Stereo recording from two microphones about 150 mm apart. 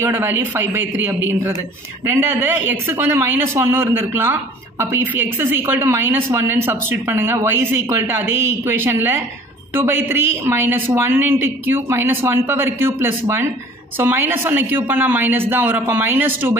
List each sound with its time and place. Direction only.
0.0 s speech: 15° right (ahead or behind)